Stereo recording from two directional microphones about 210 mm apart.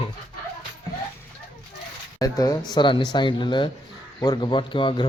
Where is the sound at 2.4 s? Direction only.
20° left (ahead or behind).